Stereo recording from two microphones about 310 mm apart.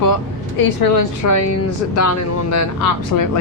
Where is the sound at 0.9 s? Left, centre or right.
Left.